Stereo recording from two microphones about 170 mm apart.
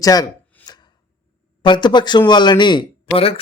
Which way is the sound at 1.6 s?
25° left (ahead or behind).